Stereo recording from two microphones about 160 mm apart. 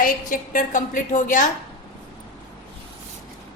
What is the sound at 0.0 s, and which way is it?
A woman's voice, 60° left (ahead or behind).